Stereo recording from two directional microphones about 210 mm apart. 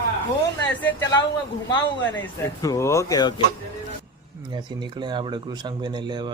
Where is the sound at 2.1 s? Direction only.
15° left (ahead or behind).